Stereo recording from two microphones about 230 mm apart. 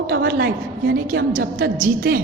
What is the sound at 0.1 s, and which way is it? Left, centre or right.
A woman's voice, right.